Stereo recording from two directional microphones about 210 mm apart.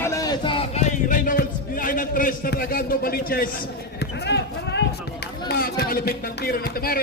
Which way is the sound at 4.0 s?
55° left (ahead or behind).